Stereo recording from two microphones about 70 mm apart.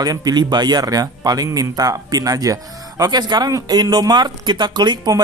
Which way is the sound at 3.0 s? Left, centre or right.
Right.